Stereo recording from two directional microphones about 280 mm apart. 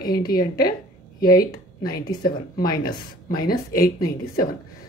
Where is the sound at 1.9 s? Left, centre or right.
Left.